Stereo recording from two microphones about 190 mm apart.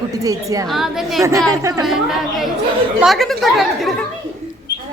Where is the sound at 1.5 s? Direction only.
15° right (ahead or behind).